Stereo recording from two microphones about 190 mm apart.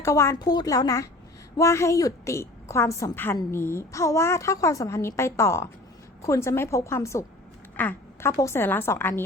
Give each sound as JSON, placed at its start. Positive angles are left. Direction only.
{"t": 0.0, "sound": "a woman's voice", "side_deg": 15}